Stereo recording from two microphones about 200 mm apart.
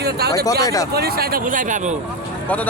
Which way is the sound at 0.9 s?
50° right (ahead or behind).